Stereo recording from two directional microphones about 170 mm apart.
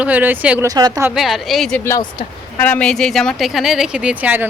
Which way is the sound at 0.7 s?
20° right (ahead or behind).